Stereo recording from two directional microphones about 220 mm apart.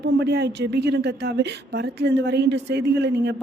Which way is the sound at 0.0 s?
50° right (ahead or behind).